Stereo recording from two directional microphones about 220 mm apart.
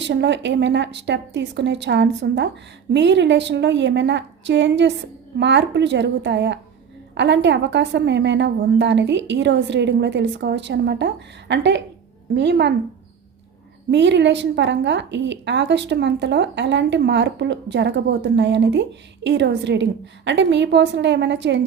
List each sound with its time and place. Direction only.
0.0 s a woman's voice: 55° right (ahead or behind)
13.9 s a woman's voice: 55° right (ahead or behind)